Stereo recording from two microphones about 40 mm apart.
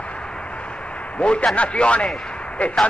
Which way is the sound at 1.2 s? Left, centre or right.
Left.